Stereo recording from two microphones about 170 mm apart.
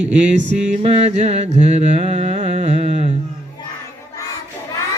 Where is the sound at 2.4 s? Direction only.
45° right (ahead or behind).